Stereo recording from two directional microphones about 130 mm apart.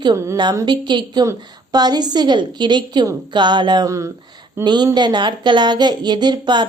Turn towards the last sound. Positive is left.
turn(degrees=-35)  # may be behind; listen again after turning